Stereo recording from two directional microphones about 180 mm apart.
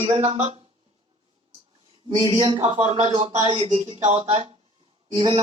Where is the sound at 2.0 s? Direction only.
30° right (ahead or behind).